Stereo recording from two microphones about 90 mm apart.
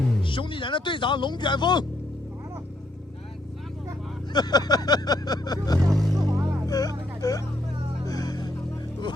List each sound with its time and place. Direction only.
0.2 s speech: 65° left (ahead or behind)
4.3 s speech: 50° left (ahead or behind)
5.9 s speech: centre (ahead or behind)
6.1 s vehicle: 40° right (ahead or behind)
6.7 s a sound: 45° left (ahead or behind)
8.0 s music: 45° left (ahead or behind)